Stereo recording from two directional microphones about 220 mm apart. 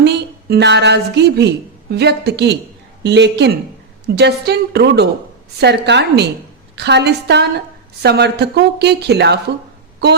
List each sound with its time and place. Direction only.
0.0 s a woman's voice: 50° right (ahead or behind)